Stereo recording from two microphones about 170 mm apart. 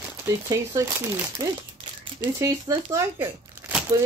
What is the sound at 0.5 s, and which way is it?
Speech, 15° right (ahead or behind).